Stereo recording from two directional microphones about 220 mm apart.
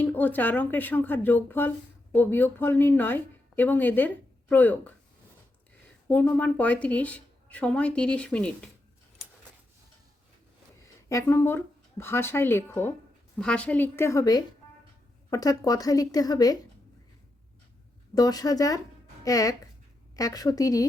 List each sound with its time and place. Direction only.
0.0 s speech: 10° left (ahead or behind)
6.1 s a woman's voice: 10° left (ahead or behind)
11.1 s speech: 15° left (ahead or behind)
18.1 s speech: 15° left (ahead or behind)